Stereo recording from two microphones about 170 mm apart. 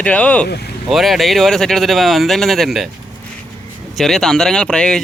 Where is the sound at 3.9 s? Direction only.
Centre (ahead or behind).